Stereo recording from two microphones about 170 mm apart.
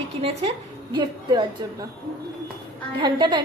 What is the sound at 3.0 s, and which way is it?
Speech, 25° right (ahead or behind).